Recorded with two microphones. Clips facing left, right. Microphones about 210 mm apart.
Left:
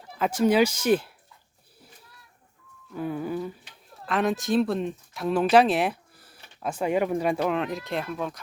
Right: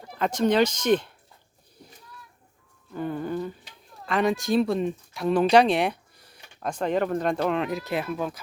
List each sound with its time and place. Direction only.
0.1 s speech: 5° left (ahead or behind)
2.9 s speech: 5° left (ahead or behind)